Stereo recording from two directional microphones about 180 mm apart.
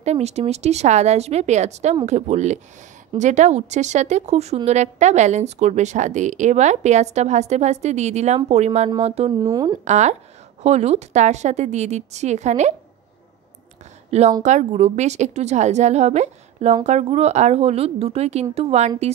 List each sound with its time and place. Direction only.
0.0 s a woman's voice: 35° right (ahead or behind)
9.4 s speech: 20° right (ahead or behind)
9.8 s a woman's voice: 40° right (ahead or behind)
14.4 s a woman's voice: 40° right (ahead or behind)